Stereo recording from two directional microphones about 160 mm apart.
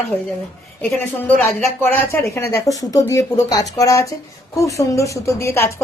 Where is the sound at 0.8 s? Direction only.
10° left (ahead or behind).